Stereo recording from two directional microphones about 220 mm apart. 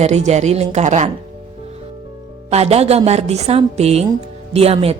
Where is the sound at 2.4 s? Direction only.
30° right (ahead or behind).